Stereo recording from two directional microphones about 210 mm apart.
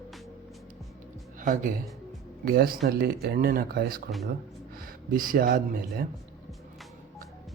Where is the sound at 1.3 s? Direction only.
40° right (ahead or behind).